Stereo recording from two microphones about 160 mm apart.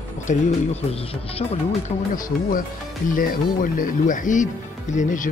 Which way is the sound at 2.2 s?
60° left (ahead or behind).